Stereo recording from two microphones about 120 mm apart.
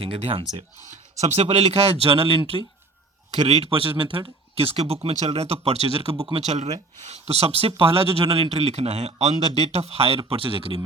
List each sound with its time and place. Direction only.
0.0 s speech: 55° right (ahead or behind)
0.9 s speech: 70° right (ahead or behind); by 2.6 s 50° right (ahead or behind)
3.3 s speech: 60° right (ahead or behind)
6.3 s speech: 70° right (ahead or behind); by 10.8 s 50° right (ahead or behind)